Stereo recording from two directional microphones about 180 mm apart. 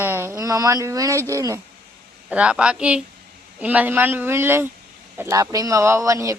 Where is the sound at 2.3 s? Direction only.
5° right (ahead or behind).